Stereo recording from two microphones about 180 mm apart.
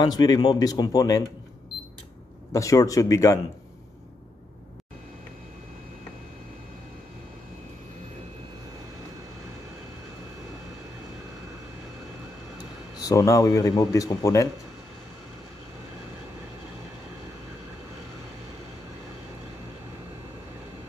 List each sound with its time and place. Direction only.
0.0 s speech: 20° left (ahead or behind)
2.5 s speech: 20° left (ahead or behind)
12.9 s speech: 20° left (ahead or behind)